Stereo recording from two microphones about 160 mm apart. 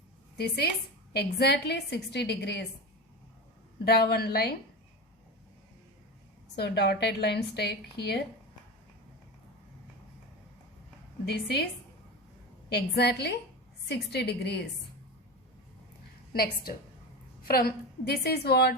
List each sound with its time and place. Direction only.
0.3 s a woman's voice: 90° left
3.8 s a woman's voice: 80° left
6.6 s a woman's voice: 90° left
11.3 s a woman's voice: 90° left
12.7 s a woman's voice: 90° left
16.3 s a woman's voice: 70° left (ahead or behind); by 18.7 s 90° left